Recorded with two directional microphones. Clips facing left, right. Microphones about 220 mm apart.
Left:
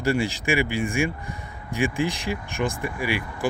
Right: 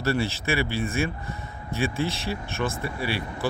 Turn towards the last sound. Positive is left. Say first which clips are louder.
# left 2 dB
turn(degrees=15)  # may be behind; listen again after turning